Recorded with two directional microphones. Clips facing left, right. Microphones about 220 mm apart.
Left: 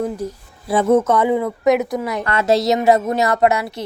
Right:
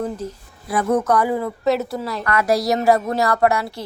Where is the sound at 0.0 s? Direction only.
10° left (ahead or behind).